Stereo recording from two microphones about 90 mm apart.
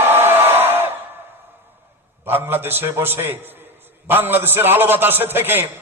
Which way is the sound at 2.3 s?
25° right (ahead or behind).